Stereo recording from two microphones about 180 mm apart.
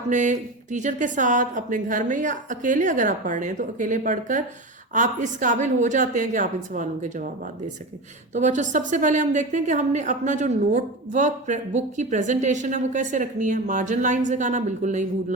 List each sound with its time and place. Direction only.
0.1 s a woman's voice: 45° right (ahead or behind)
8.3 s a woman's voice: 40° right (ahead or behind)